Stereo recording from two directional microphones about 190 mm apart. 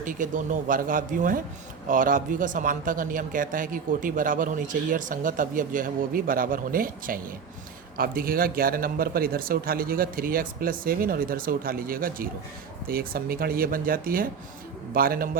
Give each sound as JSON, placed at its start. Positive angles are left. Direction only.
{"t": 0.0, "sound": "a man's voice", "side_deg": -45}